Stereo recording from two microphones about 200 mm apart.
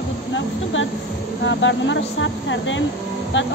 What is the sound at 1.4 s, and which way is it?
Speech, 65° left (ahead or behind).